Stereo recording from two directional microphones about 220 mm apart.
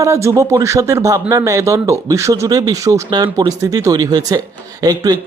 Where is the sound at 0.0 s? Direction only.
15° right (ahead or behind).